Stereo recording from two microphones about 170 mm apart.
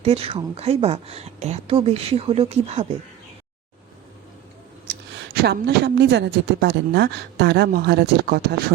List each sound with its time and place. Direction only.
0.0 s speech: 35° right (ahead or behind)
5.3 s a woman's voice: 75° right (ahead or behind)